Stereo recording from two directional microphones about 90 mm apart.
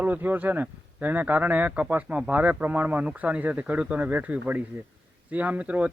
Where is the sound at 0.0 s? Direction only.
20° right (ahead or behind).